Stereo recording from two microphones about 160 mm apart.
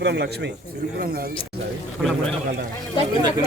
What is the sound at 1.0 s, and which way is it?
Speech, 70° right (ahead or behind).